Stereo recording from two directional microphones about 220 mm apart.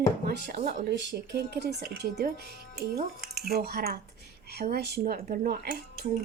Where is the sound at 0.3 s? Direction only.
45° right (ahead or behind).